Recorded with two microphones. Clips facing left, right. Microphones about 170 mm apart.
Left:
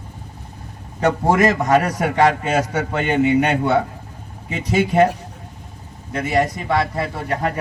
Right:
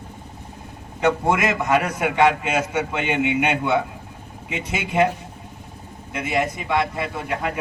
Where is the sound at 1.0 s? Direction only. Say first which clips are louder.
Left 3 dB; 35° left (ahead or behind).